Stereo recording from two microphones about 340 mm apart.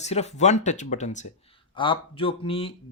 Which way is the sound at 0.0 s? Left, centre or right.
Centre.